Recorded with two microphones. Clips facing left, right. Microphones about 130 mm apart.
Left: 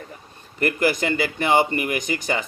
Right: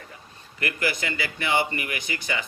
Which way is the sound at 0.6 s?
45° left (ahead or behind).